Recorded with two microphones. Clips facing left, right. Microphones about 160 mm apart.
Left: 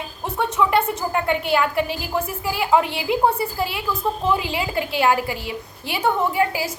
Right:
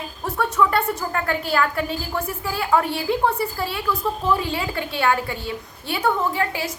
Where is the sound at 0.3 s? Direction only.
20° left (ahead or behind).